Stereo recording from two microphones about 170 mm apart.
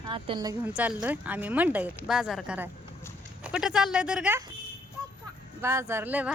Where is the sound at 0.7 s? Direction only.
5° right (ahead or behind).